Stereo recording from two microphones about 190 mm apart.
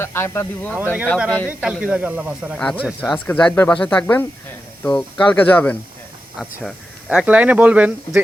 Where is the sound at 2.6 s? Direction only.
5° left (ahead or behind).